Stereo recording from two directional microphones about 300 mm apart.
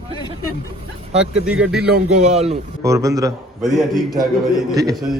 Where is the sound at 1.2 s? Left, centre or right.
Centre.